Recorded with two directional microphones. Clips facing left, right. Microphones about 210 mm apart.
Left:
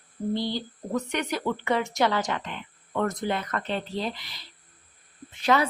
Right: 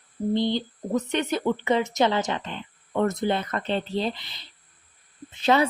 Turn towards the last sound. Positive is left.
turn(degrees=-25)  # may be behind; listen again after turning